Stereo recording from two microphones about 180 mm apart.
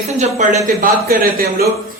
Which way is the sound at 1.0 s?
55° right (ahead or behind).